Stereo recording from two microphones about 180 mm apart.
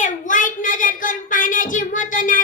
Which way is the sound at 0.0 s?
45° left (ahead or behind).